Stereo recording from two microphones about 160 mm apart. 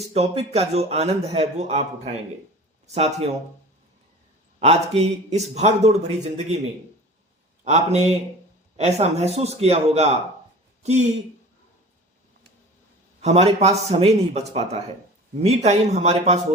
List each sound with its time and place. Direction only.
0.1 s a man's voice: 40° right (ahead or behind)
4.6 s a man's voice: 40° right (ahead or behind)
7.6 s a man's voice: 45° right (ahead or behind)
13.2 s a man's voice: 40° right (ahead or behind)